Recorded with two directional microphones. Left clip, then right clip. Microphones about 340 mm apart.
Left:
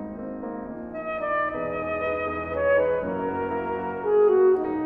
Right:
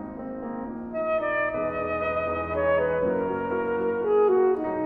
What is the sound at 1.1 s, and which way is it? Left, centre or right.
Music, centre.